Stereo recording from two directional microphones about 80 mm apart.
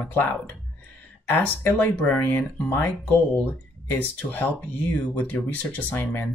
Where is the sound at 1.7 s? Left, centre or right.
Centre.